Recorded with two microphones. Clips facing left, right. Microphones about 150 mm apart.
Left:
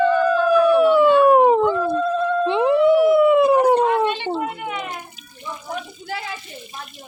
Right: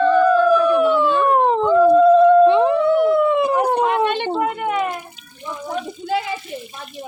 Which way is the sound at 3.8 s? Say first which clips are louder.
Right 1 dB; 60° right (ahead or behind).